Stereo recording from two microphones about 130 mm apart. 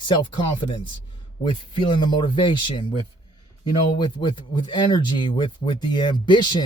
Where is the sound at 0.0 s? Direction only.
40° left (ahead or behind).